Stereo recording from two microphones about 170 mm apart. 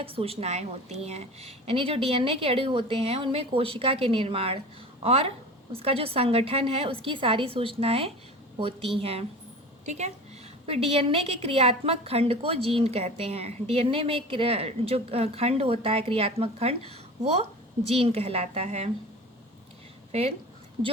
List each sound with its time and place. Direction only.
0.0 s a woman's voice: 35° right (ahead or behind)